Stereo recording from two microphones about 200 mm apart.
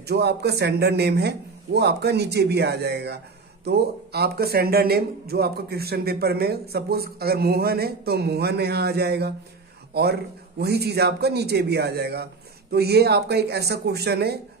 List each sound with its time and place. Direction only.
0.0 s a man's voice: 55° right (ahead or behind)
10.6 s a man's voice: 55° right (ahead or behind)